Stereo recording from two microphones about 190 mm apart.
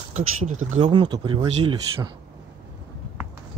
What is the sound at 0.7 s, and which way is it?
Speech, 25° right (ahead or behind).